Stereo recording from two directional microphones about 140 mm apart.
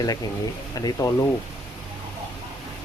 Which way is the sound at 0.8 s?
25° left (ahead or behind).